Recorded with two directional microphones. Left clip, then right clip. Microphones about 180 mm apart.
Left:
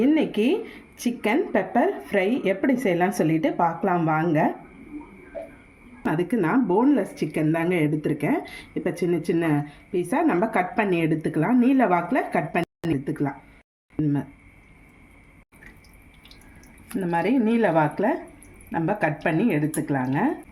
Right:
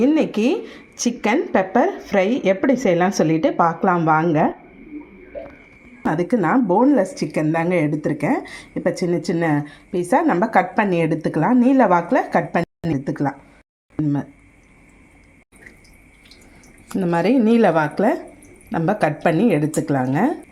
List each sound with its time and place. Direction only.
0.0 s speech: 20° right (ahead or behind)
6.1 s speech: 20° right (ahead or behind)
17.0 s speech: 30° right (ahead or behind)